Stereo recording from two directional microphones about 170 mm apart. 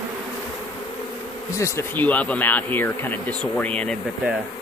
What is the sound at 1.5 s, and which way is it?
Speech, 15° left (ahead or behind).